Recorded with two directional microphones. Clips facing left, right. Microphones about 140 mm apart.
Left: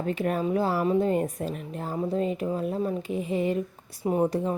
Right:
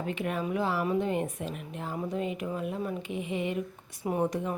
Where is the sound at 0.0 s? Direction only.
40° left (ahead or behind).